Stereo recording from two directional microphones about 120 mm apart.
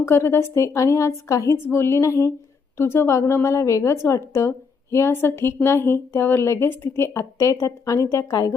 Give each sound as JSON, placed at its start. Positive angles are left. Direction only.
{"t": 0.0, "sound": "speech", "side_deg": 20}